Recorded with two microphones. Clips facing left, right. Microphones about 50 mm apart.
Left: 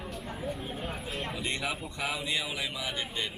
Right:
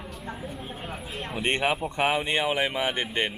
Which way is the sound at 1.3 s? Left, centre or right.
Right.